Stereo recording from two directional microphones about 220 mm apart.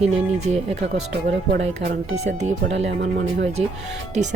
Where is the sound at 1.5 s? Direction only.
55° right (ahead or behind).